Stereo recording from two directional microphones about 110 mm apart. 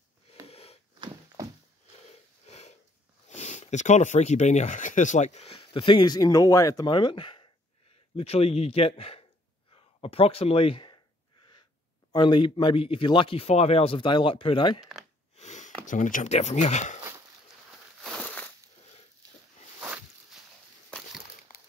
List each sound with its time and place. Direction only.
0.5 s a sound: 65° left (ahead or behind)
2.4 s sniff: 80° left
3.3 s speech: 90° left
5.6 s speech: 50° left (ahead or behind); by 6.9 s 30° left (ahead or behind)
6.9 s speech: 45° left (ahead or behind)
8.2 s a man's voice: 65° left (ahead or behind)
12.1 s speech: 45° left (ahead or behind)
15.3 s sniff: 90° left
16.0 s speech: 90° left
18.2 s a sound: 15° left (ahead or behind)